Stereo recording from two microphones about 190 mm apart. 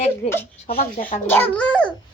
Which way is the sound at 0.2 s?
35° left (ahead or behind).